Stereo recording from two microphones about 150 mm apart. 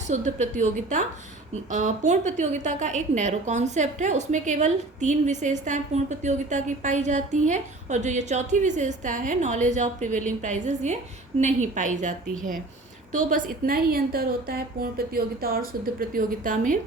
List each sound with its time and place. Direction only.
0.1 s a woman's voice: 50° right (ahead or behind)
13.1 s a woman's voice: 70° right (ahead or behind)